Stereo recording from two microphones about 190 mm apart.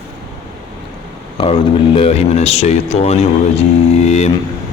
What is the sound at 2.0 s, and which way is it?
Mantra, 35° left (ahead or behind).